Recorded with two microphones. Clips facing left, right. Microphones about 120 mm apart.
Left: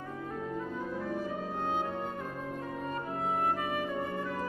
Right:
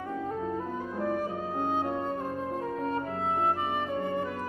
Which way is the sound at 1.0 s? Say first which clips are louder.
Right 4 dB; 50° right (ahead or behind).